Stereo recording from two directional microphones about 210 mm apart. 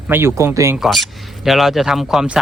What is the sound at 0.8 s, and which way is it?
Speech, centre (ahead or behind).